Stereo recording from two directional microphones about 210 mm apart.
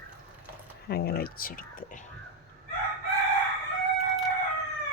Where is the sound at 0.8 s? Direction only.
50° left (ahead or behind).